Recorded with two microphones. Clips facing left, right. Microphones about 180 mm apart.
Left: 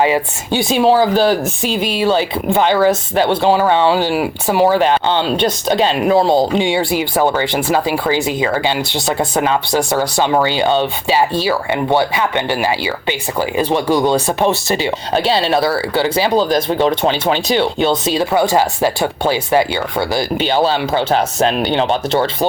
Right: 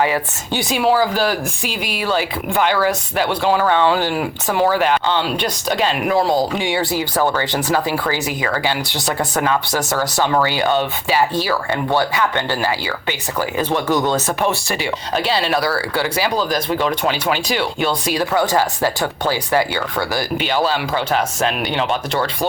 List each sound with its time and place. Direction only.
0.0 s speech: 20° left (ahead or behind)
14.4 s speech: 25° left (ahead or behind)